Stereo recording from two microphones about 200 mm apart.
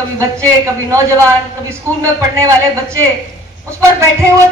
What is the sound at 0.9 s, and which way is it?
A woman's voice, 15° right (ahead or behind).